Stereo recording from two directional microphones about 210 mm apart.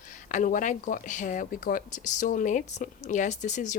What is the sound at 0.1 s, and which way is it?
Speech, 35° left (ahead or behind).